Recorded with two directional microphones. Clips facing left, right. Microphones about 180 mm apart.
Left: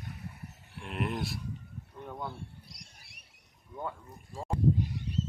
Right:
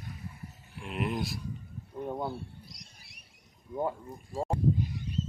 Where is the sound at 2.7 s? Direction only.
60° left (ahead or behind).